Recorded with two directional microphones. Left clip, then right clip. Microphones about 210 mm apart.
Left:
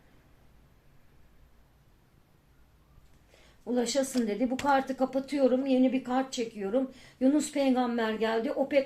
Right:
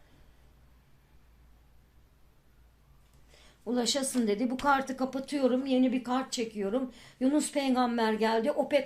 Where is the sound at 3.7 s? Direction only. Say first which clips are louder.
Left 1 dB; 35° right (ahead or behind).